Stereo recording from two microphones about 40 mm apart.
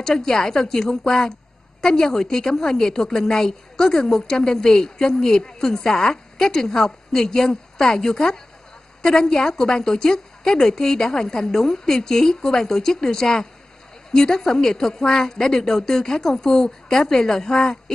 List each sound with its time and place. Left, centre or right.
0.0 s a woman's voice: centre